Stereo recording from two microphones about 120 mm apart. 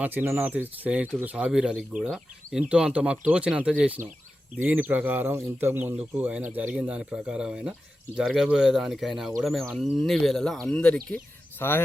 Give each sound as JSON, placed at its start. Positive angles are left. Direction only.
{"t": 0.0, "sound": "speech", "side_deg": -15}
{"t": 11.6, "sound": "speech", "side_deg": 20}